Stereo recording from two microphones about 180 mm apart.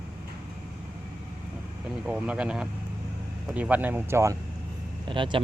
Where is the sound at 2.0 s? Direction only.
5° right (ahead or behind).